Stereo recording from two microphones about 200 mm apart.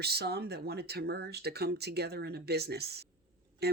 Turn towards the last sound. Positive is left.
turn(degrees=-55)  # may be behind; listen again after turning